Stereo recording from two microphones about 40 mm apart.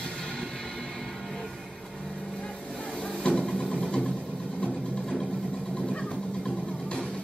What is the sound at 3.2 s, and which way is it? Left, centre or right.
Vehicle, left.